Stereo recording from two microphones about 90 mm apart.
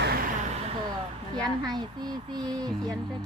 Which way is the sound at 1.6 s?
55° right (ahead or behind).